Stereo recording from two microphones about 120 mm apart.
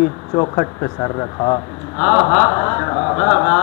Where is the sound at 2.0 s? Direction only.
15° left (ahead or behind).